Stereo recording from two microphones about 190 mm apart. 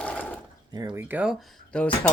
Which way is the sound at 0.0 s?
5° left (ahead or behind).